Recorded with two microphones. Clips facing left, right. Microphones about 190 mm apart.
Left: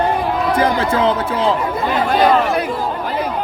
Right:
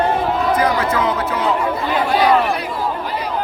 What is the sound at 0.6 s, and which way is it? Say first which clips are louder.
Speech: left 2 dB; 30° left (ahead or behind).